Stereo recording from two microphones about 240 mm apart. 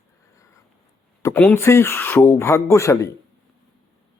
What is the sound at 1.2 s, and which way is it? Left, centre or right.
Speech, centre.